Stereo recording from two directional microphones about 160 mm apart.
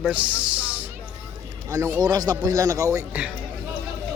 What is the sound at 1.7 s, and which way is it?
Speech, 20° right (ahead or behind).